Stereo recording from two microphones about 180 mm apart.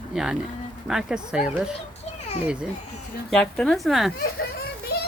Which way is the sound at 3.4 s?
5° left (ahead or behind).